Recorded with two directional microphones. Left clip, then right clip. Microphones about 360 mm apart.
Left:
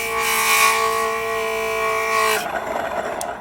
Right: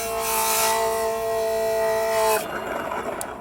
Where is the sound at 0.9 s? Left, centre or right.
Centre.